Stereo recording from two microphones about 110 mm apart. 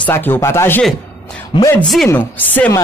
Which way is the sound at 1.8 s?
5° left (ahead or behind).